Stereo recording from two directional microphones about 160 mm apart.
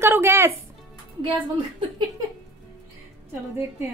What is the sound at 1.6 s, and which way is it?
Speech, 30° right (ahead or behind).